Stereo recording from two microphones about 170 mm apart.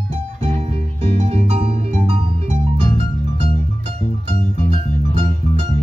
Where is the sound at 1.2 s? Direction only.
40° right (ahead or behind).